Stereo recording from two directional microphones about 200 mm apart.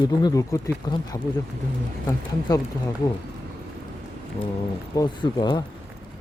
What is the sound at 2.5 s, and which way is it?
Speech, 20° left (ahead or behind).